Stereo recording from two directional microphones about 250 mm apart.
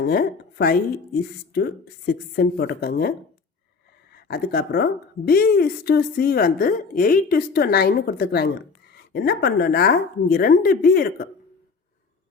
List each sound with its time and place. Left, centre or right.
0.1 s a woman's voice: left
4.1 s a woman's voice: left